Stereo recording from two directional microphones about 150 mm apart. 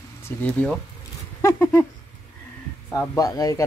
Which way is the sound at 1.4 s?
15° left (ahead or behind).